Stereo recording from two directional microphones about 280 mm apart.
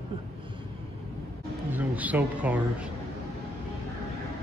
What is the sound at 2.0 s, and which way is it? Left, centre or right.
Speech, centre.